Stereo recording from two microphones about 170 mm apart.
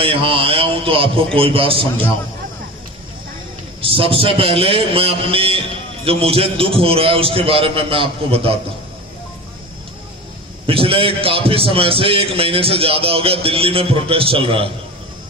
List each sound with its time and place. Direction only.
0.0 s a man's voice: 30° right (ahead or behind)
3.8 s a man's voice: 35° right (ahead or behind)
10.7 s a man's voice: 30° right (ahead or behind)